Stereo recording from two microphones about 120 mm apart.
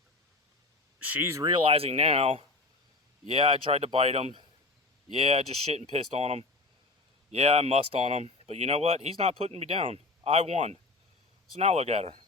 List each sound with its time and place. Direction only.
0.9 s speech: 15° right (ahead or behind)
1.5 s speech: 45° right (ahead or behind)